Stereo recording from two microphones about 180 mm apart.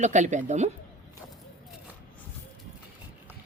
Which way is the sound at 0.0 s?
40° right (ahead or behind).